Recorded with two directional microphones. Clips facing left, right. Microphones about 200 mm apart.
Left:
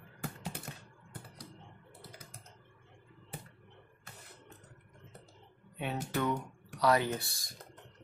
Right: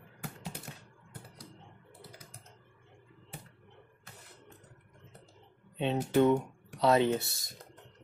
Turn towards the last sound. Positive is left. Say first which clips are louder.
# right 7 dB
turn(degrees=-25)  # may be behind; listen again after turning